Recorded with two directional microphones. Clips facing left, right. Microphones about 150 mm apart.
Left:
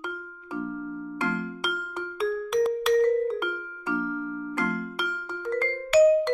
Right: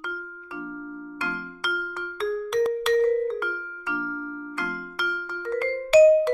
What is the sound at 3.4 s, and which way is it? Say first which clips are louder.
Music: even; 20° left (ahead or behind).